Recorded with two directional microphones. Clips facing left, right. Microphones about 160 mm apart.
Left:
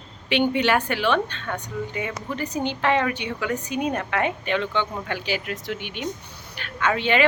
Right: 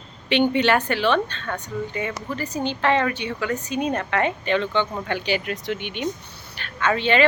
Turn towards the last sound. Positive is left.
turn(degrees=10)  # may be behind; listen again after turning